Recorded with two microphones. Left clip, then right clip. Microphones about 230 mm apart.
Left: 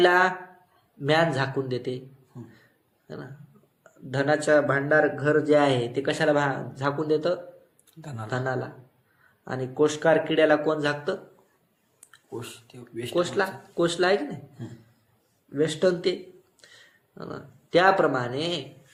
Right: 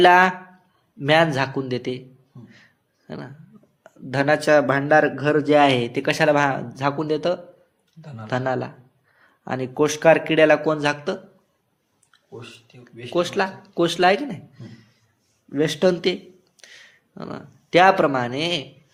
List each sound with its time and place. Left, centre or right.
0.0 s a man's voice: right
3.8 s a man's voice: right
12.4 s speech: left
13.1 s a man's voice: right
15.5 s a man's voice: right